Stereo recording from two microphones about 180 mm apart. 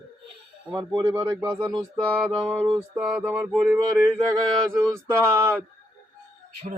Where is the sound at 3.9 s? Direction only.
5° left (ahead or behind).